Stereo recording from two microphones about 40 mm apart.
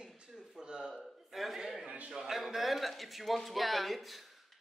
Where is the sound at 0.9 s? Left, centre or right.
Centre.